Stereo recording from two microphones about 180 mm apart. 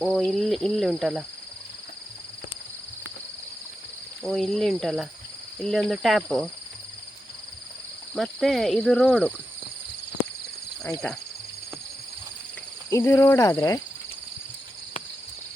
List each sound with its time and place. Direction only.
0.0 s speech: centre (ahead or behind)
4.2 s speech: centre (ahead or behind)
8.1 s speech: centre (ahead or behind)
12.9 s speech: 15° left (ahead or behind)